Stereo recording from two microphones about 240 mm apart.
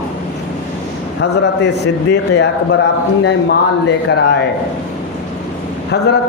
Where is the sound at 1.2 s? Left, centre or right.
Left.